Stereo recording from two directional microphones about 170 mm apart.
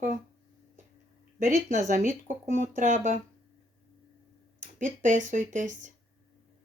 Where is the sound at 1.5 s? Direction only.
50° right (ahead or behind).